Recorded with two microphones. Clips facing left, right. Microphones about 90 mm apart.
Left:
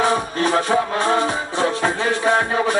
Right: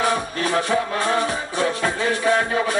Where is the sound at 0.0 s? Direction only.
25° left (ahead or behind).